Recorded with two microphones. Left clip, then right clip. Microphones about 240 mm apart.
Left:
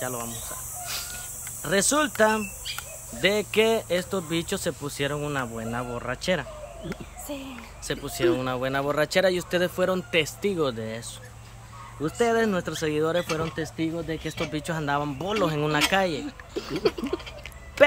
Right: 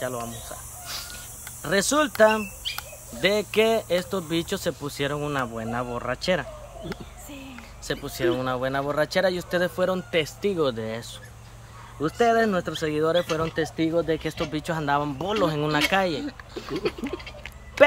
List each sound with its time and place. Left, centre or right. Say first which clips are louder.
0.0 s speech: right 2 dB; centre
2.6 s bird: right 3 dB; right
3.2 s speech: right 1 dB; centre
7.8 s speech: left 1 dB; centre
14.4 s speech: right 2 dB; centre
16.5 s a sound: left 3 dB; centre